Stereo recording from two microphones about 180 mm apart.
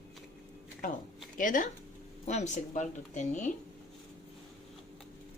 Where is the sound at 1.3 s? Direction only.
50° left (ahead or behind).